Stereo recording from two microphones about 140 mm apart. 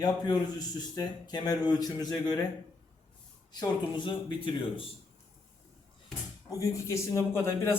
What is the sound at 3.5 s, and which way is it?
Speech, 35° left (ahead or behind).